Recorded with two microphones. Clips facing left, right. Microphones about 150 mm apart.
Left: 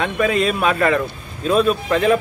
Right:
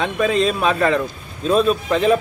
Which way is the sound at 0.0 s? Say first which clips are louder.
Even; 5° left (ahead or behind).